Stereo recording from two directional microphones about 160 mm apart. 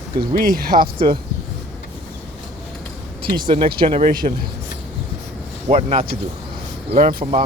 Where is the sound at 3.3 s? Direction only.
35° right (ahead or behind).